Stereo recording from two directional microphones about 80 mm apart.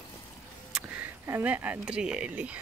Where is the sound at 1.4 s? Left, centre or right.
Centre.